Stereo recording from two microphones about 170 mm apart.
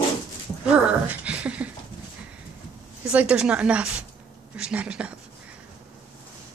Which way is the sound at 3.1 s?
5° right (ahead or behind).